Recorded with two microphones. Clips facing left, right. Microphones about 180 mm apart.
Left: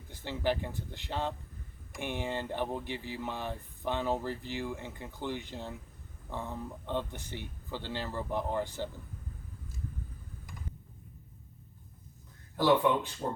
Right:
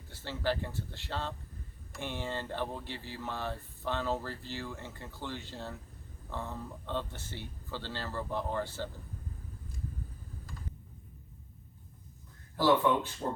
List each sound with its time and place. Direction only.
0.1 s speech: 15° left (ahead or behind)
12.5 s speech: 15° left (ahead or behind)